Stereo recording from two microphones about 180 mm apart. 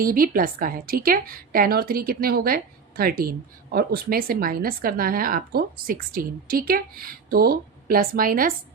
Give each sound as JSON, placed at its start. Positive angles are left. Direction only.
{"t": 0.0, "sound": "a woman's voice", "side_deg": -55}